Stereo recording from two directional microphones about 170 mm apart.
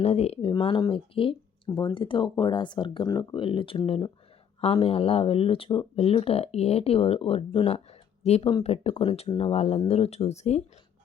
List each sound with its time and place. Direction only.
0.0 s speech: 40° left (ahead or behind)
0.5 s speech: 25° left (ahead or behind)